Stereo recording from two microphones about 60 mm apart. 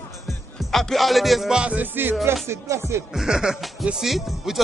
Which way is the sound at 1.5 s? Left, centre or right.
Right.